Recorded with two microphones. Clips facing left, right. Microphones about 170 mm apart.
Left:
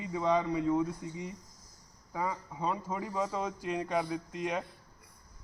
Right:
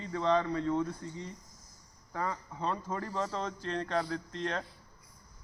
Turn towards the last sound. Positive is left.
turn(degrees=10)  # may be behind; listen again after turning